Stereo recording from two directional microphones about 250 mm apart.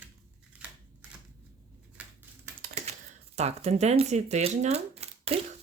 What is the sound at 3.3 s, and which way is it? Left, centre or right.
Speech, right.